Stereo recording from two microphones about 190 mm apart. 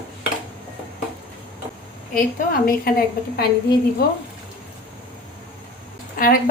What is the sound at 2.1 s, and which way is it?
A woman's voice, 50° left (ahead or behind).